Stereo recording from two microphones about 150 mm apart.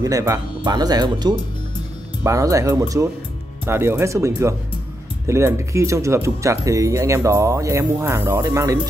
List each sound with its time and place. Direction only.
0.0 s speech: 20° right (ahead or behind)